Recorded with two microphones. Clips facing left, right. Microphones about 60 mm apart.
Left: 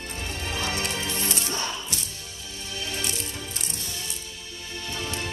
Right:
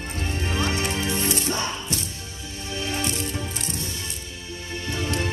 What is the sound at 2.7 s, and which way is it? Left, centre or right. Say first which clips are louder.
Music: right 5 dB; right.